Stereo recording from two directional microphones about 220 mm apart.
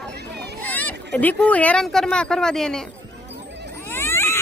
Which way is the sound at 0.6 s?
5° left (ahead or behind).